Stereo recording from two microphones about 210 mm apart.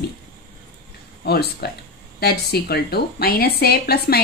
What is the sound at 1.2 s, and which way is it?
Speech, 50° left (ahead or behind).